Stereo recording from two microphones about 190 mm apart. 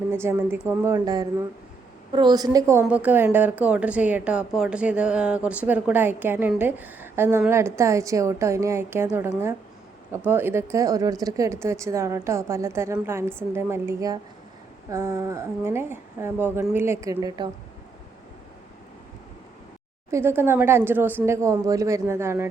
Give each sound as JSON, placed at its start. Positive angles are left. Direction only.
{"t": 0.1, "sound": "a woman's voice", "side_deg": -10}
{"t": 20.1, "sound": "a woman's voice", "side_deg": -15}